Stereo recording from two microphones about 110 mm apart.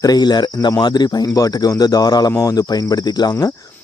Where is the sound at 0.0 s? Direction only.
40° left (ahead or behind).